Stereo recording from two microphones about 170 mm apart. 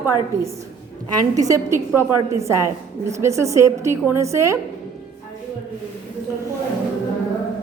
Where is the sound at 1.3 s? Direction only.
20° right (ahead or behind).